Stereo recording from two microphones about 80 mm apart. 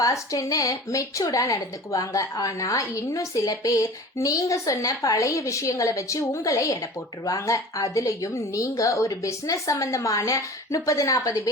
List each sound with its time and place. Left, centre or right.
0.0 s speech: left